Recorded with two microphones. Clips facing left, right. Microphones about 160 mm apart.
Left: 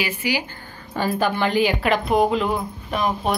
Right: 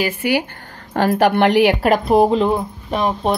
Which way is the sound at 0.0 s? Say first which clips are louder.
Right 6 dB; 55° right (ahead or behind).